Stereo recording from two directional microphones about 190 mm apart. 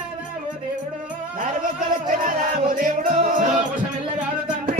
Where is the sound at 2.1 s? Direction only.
45° right (ahead or behind).